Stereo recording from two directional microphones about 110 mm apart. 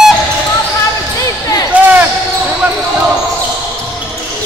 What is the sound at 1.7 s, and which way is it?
Basketball bounce, 15° right (ahead or behind).